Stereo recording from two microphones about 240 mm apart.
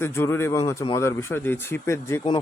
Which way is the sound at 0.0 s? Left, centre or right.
Centre.